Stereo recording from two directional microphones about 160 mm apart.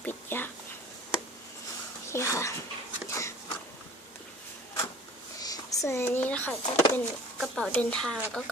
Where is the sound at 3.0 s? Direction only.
20° left (ahead or behind).